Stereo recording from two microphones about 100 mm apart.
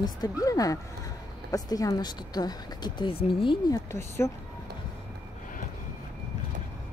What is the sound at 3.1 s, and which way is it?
Speech, 65° left (ahead or behind).